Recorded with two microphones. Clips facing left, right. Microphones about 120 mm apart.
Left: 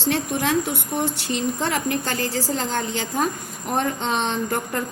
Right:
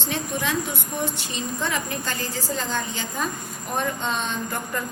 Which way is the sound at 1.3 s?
75° left (ahead or behind).